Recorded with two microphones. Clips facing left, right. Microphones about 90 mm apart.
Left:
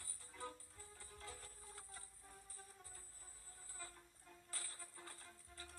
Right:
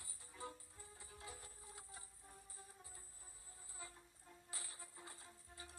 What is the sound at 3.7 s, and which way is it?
Music, 15° right (ahead or behind).